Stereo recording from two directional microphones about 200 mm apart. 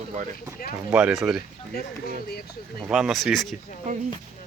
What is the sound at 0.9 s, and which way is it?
Speech, 5° right (ahead or behind).